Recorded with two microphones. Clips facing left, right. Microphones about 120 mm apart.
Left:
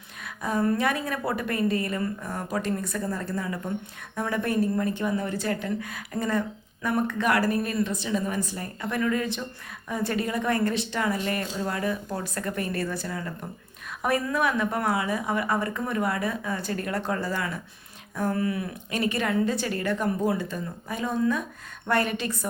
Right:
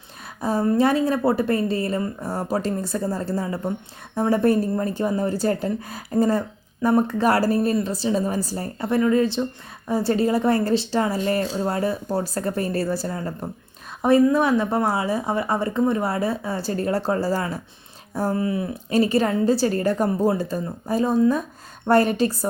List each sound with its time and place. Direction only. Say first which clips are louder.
0.4 s a woman's voice: right 5 dB; 30° right (ahead or behind)